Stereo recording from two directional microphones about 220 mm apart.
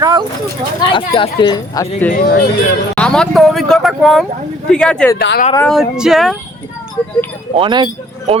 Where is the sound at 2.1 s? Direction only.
45° left (ahead or behind).